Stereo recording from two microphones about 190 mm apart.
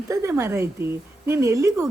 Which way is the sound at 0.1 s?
15° right (ahead or behind).